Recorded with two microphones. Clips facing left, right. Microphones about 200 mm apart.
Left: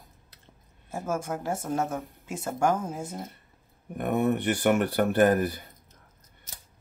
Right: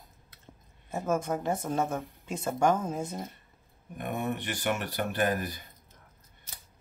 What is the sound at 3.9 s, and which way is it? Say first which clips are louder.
Speech: left 7 dB; 60° left (ahead or behind).